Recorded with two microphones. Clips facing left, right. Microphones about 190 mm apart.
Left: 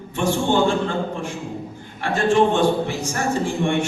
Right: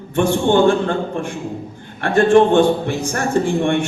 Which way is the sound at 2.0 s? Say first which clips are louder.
Right 5 dB; 55° right (ahead or behind).